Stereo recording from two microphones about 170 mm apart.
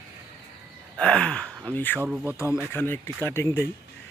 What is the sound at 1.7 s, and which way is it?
Speech, 10° left (ahead or behind).